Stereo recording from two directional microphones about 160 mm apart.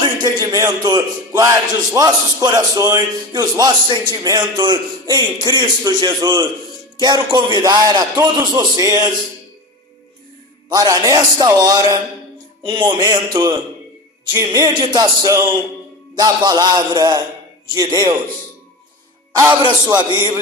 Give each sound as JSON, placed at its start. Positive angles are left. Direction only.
{"t": 0.0, "sound": "a man's voice", "side_deg": -25}
{"t": 10.7, "sound": "a man's voice", "side_deg": -25}
{"t": 19.9, "sound": "a man's voice", "side_deg": -30}